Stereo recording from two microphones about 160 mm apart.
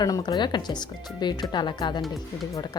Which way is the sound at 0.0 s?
25° left (ahead or behind).